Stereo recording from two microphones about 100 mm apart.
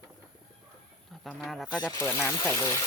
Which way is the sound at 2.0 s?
25° left (ahead or behind).